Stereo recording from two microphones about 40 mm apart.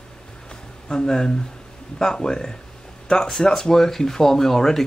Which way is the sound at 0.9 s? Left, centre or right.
Centre.